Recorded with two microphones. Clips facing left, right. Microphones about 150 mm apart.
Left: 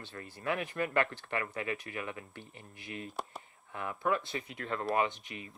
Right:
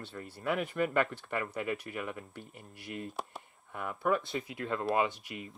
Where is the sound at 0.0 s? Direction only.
Centre (ahead or behind).